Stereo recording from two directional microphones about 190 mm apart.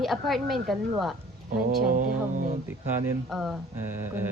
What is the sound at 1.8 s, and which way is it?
Speech, 50° right (ahead or behind).